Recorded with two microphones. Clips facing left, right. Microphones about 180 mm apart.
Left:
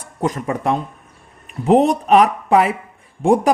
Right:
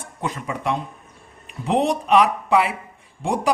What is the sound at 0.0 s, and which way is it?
Speech, 45° left (ahead or behind).